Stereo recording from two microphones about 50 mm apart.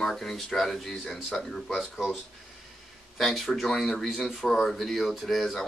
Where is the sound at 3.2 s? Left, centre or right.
Centre.